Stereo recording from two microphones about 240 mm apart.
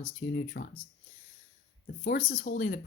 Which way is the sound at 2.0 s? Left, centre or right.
Left.